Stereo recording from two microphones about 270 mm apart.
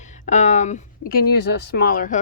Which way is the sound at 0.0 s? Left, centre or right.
Left.